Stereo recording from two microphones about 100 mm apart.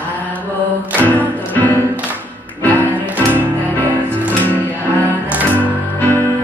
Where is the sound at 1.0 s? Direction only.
15° left (ahead or behind).